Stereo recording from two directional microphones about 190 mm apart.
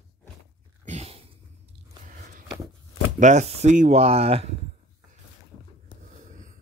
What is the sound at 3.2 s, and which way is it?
Speech, 40° right (ahead or behind).